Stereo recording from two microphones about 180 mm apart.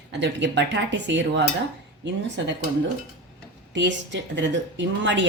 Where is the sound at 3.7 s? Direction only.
80° right.